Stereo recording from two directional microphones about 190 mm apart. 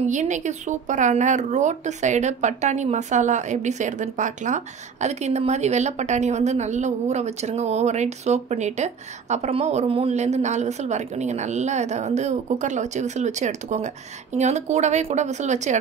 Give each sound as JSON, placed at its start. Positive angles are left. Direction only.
{"t": 0.0, "sound": "speech", "side_deg": -40}